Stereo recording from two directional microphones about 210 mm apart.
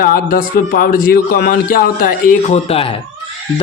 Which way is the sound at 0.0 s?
40° left (ahead or behind).